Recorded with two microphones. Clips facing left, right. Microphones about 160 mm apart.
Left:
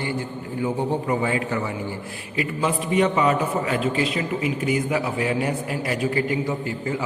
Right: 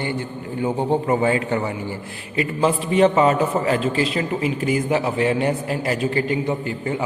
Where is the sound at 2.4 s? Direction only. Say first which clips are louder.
Right 4 dB; 30° right (ahead or behind).